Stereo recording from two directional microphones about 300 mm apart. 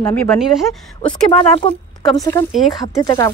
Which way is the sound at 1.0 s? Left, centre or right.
Centre.